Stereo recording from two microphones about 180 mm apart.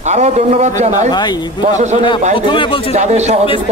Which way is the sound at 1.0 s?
25° left (ahead or behind).